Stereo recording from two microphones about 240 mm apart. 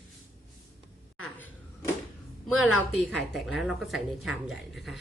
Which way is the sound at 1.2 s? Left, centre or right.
Centre.